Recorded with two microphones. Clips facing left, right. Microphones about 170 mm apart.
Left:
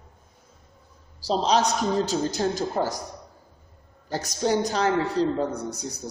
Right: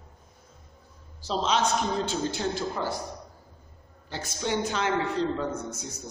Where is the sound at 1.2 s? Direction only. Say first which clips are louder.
Left 4 dB; 35° left (ahead or behind).